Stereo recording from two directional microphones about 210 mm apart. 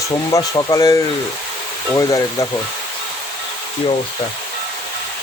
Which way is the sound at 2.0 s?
15° left (ahead or behind).